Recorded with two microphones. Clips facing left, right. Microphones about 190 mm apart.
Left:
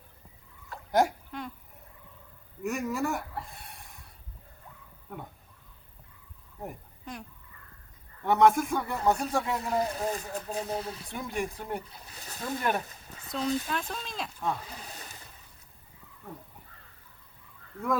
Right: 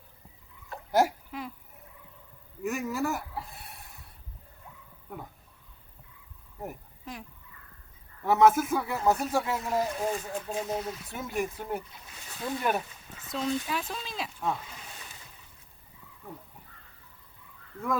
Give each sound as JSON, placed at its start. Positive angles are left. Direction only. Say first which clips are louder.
{"t": 0.9, "sound": "hiccup", "louder": "even", "side_deg": -5}
{"t": 2.6, "sound": "chicken", "louder": "even", "side_deg": 0}
{"t": 6.6, "sound": "a sound", "louder": "right 1 dB", "side_deg": 0}
{"t": 8.2, "sound": "a man's voice", "louder": "right 1 dB", "side_deg": 0}
{"t": 10.1, "sound": "speech", "louder": "right 1 dB", "side_deg": 40}
{"t": 11.1, "sound": "a man's voice", "louder": "right 1 dB", "side_deg": 0}
{"t": 11.9, "sound": "a sound", "louder": "left 2 dB", "side_deg": 35}
{"t": 12.5, "sound": "a man's voice", "louder": "even", "side_deg": -5}
{"t": 14.7, "sound": "a sound", "louder": "left 3 dB", "side_deg": 35}